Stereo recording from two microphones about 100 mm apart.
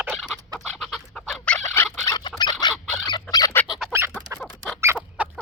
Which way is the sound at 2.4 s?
45° left (ahead or behind).